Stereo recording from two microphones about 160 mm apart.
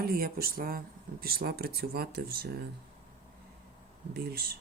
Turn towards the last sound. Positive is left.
turn(degrees=-75)  # may be behind; listen again after turning